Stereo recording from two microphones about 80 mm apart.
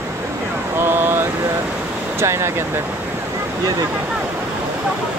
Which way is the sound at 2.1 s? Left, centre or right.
Right.